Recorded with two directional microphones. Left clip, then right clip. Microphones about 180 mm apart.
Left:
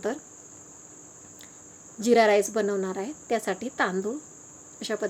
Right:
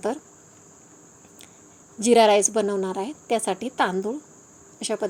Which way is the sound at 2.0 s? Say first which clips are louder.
Right 4 dB; 15° right (ahead or behind).